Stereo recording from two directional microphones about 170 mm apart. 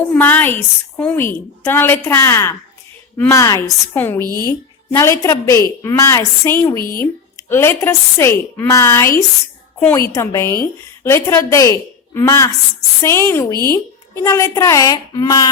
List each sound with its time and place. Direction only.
0.1 s a woman's voice: 10° left (ahead or behind)
6.8 s speech: 60° left (ahead or behind)
7.5 s a woman's voice: 15° left (ahead or behind)